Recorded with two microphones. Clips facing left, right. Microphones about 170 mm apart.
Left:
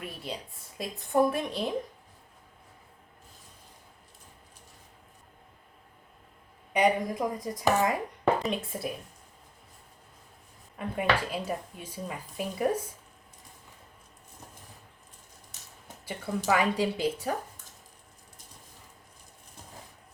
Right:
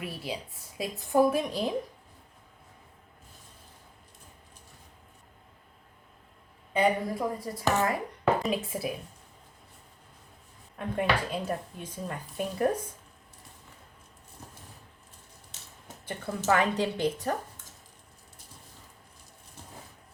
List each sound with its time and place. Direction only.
0.0 s speech: 5° right (ahead or behind)
6.7 s speech: 15° left (ahead or behind)
8.4 s speech: centre (ahead or behind)
10.8 s speech: 5° left (ahead or behind)
16.0 s speech: 5° left (ahead or behind)